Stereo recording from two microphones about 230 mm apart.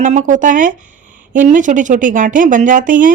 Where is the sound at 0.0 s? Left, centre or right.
Right.